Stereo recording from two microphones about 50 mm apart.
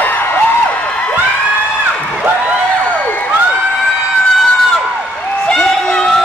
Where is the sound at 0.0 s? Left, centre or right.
Left.